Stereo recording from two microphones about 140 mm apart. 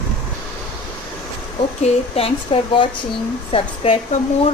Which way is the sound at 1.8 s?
45° left (ahead or behind).